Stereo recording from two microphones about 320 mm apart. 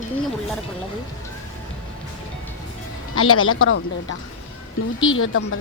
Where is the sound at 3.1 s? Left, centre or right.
Left.